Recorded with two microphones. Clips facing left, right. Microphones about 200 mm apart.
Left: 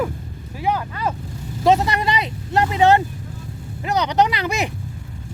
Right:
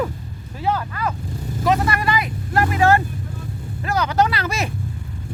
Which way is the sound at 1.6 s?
25° left (ahead or behind).